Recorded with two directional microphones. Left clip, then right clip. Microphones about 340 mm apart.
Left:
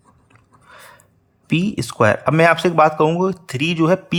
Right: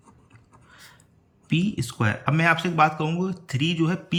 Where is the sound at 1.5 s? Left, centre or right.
Centre.